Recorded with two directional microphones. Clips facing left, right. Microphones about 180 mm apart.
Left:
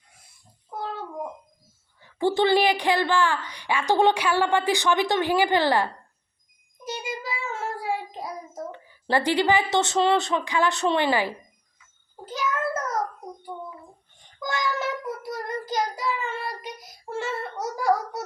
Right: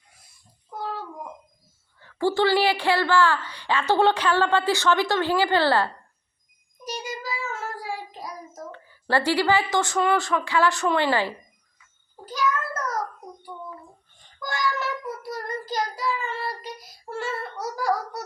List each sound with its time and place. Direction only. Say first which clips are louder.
2.0 s a woman's voice: even; 15° left (ahead or behind)
6.8 s child singing: even; 25° left (ahead or behind)
12.2 s a sound: right 1 dB; 25° left (ahead or behind)
14.2 s child singing: even; 20° left (ahead or behind)